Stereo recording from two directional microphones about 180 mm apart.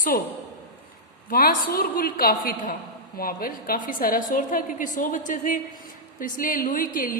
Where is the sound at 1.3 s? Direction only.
55° left (ahead or behind).